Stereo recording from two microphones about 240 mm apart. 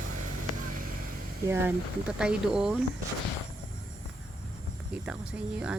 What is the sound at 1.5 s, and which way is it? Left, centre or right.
Speech, centre.